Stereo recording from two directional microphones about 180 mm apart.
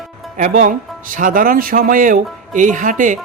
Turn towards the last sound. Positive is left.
turn(degrees=-45)  # may be behind; listen again after turning